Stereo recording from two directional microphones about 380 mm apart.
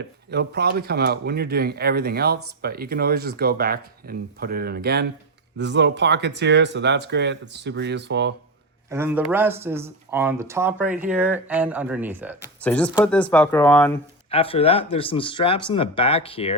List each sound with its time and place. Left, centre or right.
0.3 s speech: right
8.9 s speech: centre